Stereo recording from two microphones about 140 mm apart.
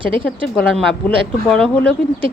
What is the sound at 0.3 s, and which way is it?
A woman's voice, centre (ahead or behind).